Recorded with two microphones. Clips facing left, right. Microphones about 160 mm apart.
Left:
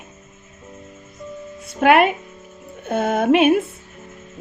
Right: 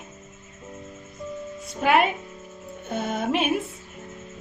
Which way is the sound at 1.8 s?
65° left (ahead or behind).